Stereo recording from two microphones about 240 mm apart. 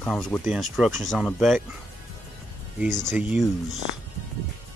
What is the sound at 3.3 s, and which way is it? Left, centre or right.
Speech, centre.